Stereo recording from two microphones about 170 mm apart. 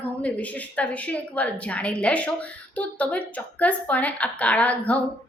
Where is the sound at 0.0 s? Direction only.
10° left (ahead or behind).